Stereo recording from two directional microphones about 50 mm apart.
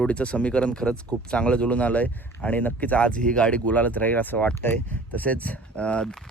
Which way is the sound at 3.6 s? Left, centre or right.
Left.